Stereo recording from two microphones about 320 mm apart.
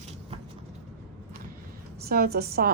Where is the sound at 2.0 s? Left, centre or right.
Right.